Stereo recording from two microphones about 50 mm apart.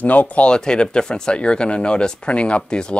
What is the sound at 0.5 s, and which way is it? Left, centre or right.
Speech, centre.